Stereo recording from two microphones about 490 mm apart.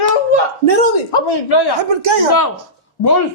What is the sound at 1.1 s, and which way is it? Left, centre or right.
Speech, left.